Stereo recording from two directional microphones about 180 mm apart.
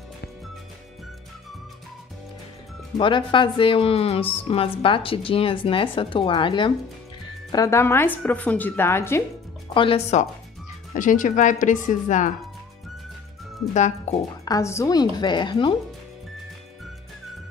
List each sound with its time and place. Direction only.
3.0 s a woman's voice: 25° left (ahead or behind)
9.8 s speech: 30° left (ahead or behind)
11.0 s speech: 45° left (ahead or behind)
13.7 s speech: 40° left (ahead or behind)
14.4 s a woman's voice: 20° left (ahead or behind)